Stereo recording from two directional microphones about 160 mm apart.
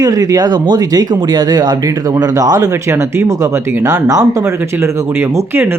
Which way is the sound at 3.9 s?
20° right (ahead or behind).